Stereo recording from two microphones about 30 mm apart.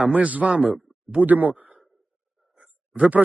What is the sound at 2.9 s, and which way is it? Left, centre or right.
Speech, right.